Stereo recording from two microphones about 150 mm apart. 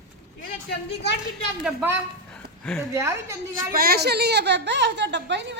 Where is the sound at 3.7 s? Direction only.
90° right.